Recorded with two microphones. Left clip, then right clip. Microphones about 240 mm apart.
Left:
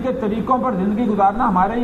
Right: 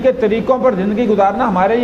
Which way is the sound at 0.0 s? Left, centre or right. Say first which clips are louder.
Right 8 dB; left.